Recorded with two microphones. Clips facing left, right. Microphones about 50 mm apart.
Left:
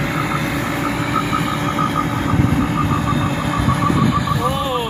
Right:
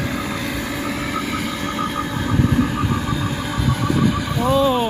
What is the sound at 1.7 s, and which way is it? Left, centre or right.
Vehicle, left.